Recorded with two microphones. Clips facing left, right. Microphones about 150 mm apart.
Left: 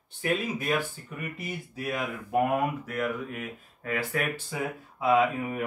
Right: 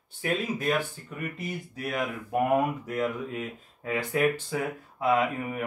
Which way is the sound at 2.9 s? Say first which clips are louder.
Right 1 dB; 20° right (ahead or behind).